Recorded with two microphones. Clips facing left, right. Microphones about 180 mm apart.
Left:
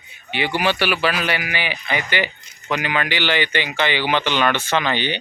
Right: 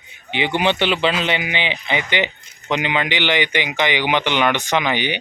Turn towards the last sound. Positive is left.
turn(degrees=-15)  # may be behind; listen again after turning